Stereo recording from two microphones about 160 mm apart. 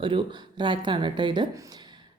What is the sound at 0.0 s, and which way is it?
Speech, 30° right (ahead or behind).